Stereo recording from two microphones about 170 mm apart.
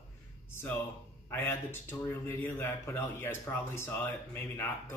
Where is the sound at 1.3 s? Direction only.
15° left (ahead or behind).